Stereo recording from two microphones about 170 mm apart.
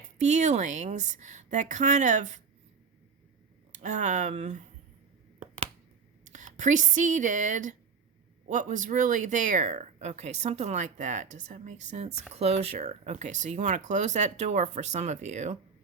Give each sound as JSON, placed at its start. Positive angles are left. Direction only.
{"t": 0.2, "sound": "speech", "side_deg": -45}
{"t": 3.7, "sound": "speech", "side_deg": -45}
{"t": 6.2, "sound": "speech", "side_deg": -45}